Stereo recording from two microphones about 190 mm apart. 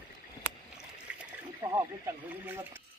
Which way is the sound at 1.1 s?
5° right (ahead or behind).